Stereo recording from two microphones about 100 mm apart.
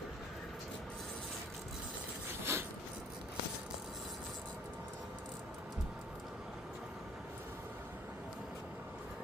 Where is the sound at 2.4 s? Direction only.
25° right (ahead or behind).